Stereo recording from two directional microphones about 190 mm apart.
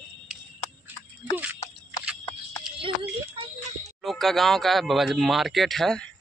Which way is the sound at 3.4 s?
30° right (ahead or behind).